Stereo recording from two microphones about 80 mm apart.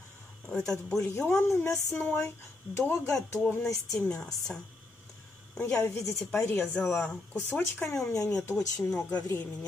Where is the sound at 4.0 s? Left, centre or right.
Centre.